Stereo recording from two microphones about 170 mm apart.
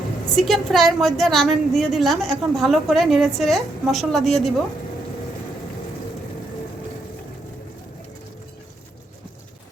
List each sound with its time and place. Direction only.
0.3 s a woman's voice: centre (ahead or behind)